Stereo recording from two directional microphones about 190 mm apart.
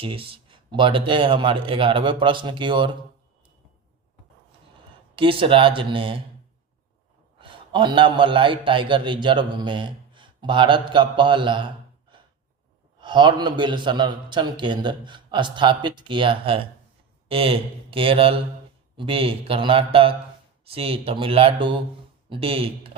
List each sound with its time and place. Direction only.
0.0 s a man's voice: 30° right (ahead or behind)
5.1 s a man's voice: 30° right (ahead or behind)
7.3 s a man's voice: 25° right (ahead or behind)
13.0 s a man's voice: 25° right (ahead or behind)